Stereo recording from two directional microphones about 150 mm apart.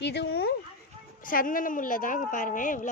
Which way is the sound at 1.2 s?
65° left (ahead or behind).